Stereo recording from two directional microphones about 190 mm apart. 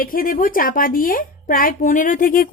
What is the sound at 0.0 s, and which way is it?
Speech, 50° left (ahead or behind).